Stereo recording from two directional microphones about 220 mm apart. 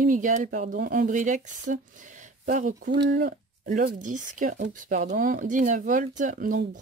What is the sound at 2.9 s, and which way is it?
Speech, 45° right (ahead or behind).